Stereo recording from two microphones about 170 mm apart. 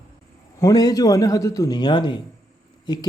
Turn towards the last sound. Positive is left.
turn(degrees=25)  # may be behind; listen again after turning